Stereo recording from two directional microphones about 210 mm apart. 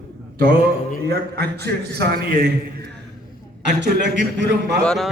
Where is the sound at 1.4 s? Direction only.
50° right (ahead or behind).